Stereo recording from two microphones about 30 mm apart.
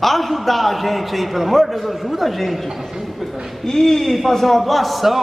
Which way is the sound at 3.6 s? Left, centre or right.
Centre.